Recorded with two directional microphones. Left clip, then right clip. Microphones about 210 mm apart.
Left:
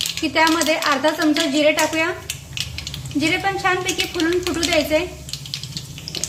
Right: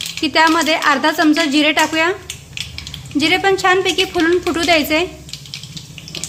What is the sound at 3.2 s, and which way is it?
Speech, 55° right (ahead or behind).